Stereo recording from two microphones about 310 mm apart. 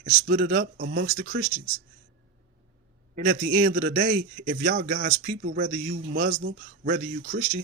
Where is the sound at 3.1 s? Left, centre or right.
Right.